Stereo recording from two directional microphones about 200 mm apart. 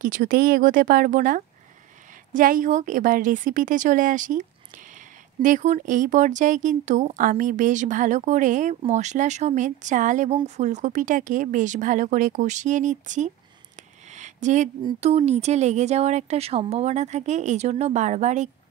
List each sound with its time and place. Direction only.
0.0 s speech: 40° right (ahead or behind)